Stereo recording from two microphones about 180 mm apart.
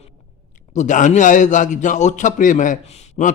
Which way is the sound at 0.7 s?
40° left (ahead or behind).